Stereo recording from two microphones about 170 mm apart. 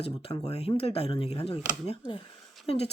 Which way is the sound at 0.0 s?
35° left (ahead or behind).